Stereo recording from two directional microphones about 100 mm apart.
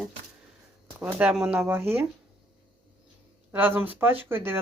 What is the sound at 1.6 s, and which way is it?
Speech, 25° right (ahead or behind).